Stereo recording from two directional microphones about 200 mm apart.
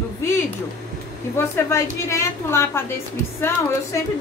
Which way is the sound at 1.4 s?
15° left (ahead or behind).